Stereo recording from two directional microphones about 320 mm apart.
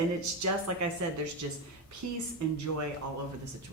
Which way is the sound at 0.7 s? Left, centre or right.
Right.